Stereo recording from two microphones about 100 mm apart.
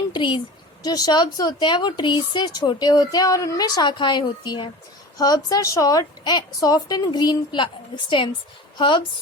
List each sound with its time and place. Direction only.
0.1 s a woman's voice: 55° left (ahead or behind)
5.1 s a woman's voice: 40° left (ahead or behind)